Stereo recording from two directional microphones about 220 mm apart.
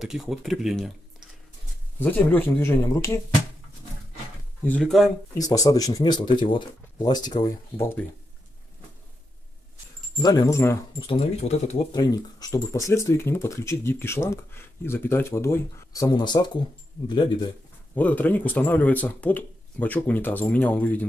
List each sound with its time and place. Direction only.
0.0 s speech: centre (ahead or behind)
2.0 s speech: 10° left (ahead or behind)
4.6 s speech: 5° left (ahead or behind)
5.4 s speech: 15° left (ahead or behind)
10.1 s speech: 15° left (ahead or behind)
11.0 s speech: 25° left (ahead or behind)
11.9 s speech: 15° left (ahead or behind)
17.9 s speech: 5° left (ahead or behind)